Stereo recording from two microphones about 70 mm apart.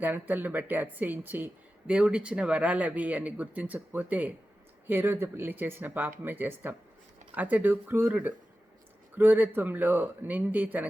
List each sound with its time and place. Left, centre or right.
0.0 s speech: right
1.9 s speech: centre
4.9 s speech: right